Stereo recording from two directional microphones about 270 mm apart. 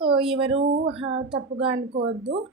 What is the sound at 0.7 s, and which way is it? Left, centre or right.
Speech, right.